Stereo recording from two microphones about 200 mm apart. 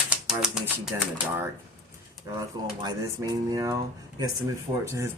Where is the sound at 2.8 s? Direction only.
15° right (ahead or behind).